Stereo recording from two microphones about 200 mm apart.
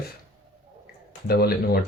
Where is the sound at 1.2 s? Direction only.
50° left (ahead or behind).